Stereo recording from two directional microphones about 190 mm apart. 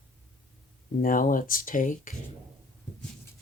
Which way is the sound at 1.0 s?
45° left (ahead or behind).